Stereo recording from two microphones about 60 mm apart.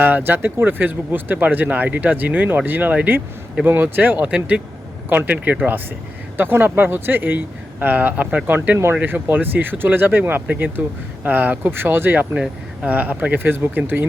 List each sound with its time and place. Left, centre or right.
0.0 s speech: right
3.7 s speech: right
6.3 s speech: right
12.3 s speech: centre
12.9 s speech: right